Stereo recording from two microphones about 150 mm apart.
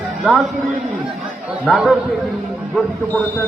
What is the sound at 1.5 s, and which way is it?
Speech, centre (ahead or behind).